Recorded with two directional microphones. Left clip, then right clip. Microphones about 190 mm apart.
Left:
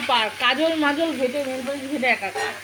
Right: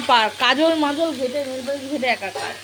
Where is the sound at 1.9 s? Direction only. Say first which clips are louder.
Left 1 dB; 5° right (ahead or behind).